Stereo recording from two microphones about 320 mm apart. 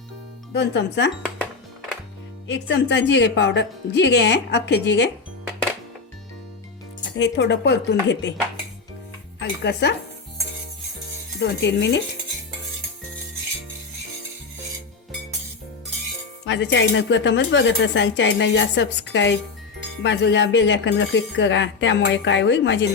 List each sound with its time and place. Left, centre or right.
0.5 s speech: left
2.5 s speech: left
7.2 s speech: left
9.4 s speech: left
11.3 s speech: left
16.5 s speech: left